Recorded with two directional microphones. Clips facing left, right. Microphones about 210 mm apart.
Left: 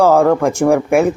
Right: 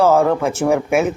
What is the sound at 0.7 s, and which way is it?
Speech, 5° right (ahead or behind).